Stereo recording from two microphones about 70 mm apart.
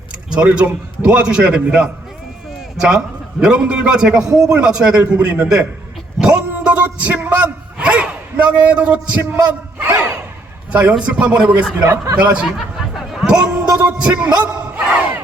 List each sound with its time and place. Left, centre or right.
0.3 s a man's voice: centre
3.4 s a man's voice: centre
12.5 s a sound: centre
13.2 s a man's voice: centre